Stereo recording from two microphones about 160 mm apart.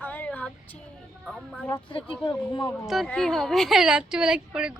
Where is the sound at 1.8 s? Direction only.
35° left (ahead or behind).